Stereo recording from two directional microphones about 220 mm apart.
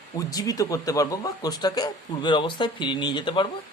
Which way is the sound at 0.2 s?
15° left (ahead or behind).